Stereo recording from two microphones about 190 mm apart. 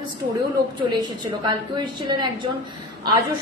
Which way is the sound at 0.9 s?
20° right (ahead or behind).